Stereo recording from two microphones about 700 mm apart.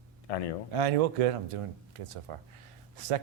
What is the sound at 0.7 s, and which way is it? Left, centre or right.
Speech, right.